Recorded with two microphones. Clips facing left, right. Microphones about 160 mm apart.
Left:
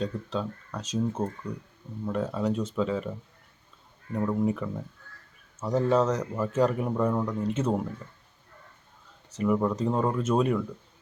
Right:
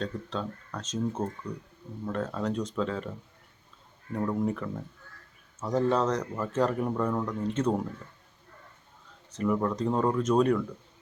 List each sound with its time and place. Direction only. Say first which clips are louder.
0.0 s speech: left 3 dB; 5° left (ahead or behind)
4.1 s speech: left 2 dB; 5° left (ahead or behind)
9.3 s speech: left 2 dB; 10° left (ahead or behind)